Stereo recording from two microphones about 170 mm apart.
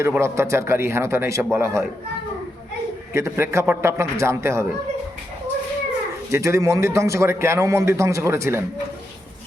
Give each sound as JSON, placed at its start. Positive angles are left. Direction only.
{"t": 0.0, "sound": "a man's voice", "side_deg": -15}
{"t": 3.2, "sound": "a man's voice", "side_deg": -15}
{"t": 6.3, "sound": "a man's voice", "side_deg": -15}